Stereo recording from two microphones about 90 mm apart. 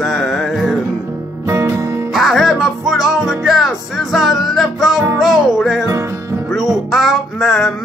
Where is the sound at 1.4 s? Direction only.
25° right (ahead or behind).